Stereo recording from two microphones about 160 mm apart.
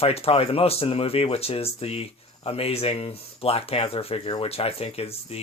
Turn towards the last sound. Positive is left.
turn(degrees=40)  # may be behind; listen again after turning